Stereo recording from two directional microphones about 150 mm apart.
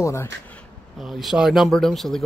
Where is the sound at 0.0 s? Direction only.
20° left (ahead or behind).